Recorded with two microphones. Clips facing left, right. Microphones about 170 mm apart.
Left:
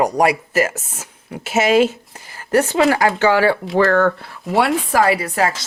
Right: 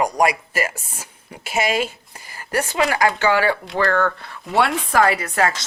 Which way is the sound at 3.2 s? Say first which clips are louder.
Left 4 dB; 45° left (ahead or behind).